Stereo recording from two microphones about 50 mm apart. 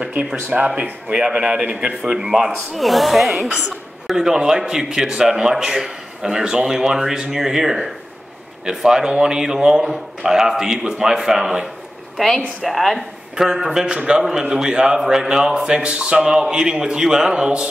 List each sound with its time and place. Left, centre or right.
0.5 s a man's voice: centre
2.7 s speech: centre
3.4 s a man's voice: centre
12.6 s speech: centre
13.4 s a man's voice: centre